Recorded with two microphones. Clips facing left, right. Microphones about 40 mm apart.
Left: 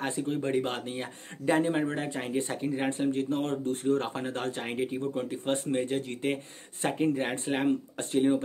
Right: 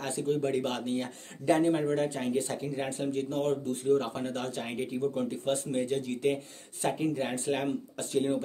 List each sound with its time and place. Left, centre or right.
0.0 s speech: left